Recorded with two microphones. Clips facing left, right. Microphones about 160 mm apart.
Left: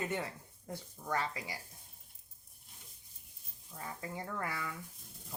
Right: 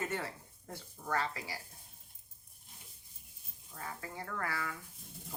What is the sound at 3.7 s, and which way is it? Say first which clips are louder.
Speech: left 1 dB; 20° left (ahead or behind).